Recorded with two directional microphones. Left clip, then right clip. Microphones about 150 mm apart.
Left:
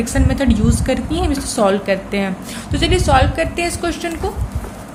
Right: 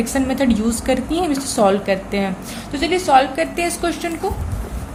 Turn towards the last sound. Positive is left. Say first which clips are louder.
# left 1 dB
turn(degrees=5)  # may be behind; listen again after turning